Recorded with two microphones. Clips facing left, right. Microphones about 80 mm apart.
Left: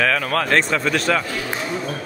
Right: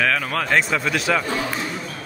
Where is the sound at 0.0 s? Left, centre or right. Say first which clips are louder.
Left 2 dB; centre.